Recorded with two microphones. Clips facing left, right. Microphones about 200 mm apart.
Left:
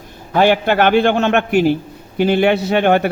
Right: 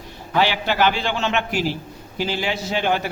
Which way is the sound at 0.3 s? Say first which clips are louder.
Left 7 dB; 50° left (ahead or behind).